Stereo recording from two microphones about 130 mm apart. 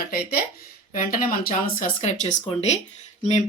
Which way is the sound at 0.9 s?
90° left.